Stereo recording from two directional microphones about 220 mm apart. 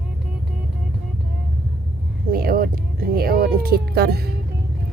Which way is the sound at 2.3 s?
45° right (ahead or behind).